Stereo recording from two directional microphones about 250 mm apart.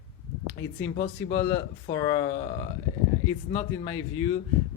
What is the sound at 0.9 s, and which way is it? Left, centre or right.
Speech, left.